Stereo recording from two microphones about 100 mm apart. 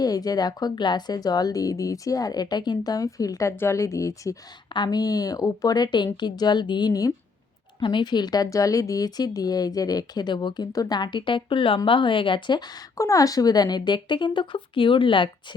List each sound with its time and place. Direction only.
0.0 s speech: 40° left (ahead or behind)
3.5 s speech: 25° left (ahead or behind)
4.7 s a woman's voice: 45° left (ahead or behind)
7.8 s a woman's voice: 50° left (ahead or behind)